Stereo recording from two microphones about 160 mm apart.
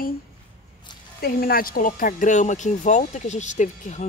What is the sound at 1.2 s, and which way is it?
Speech, 70° left (ahead or behind).